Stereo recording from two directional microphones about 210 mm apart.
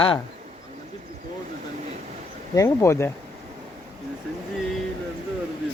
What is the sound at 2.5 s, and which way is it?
Speech, 15° left (ahead or behind).